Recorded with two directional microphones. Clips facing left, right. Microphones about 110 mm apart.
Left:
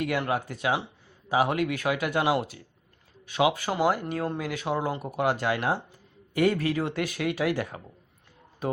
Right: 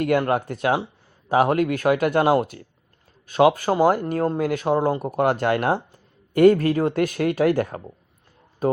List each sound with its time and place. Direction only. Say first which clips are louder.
0.0 s speech: right 7 dB; 50° right (ahead or behind)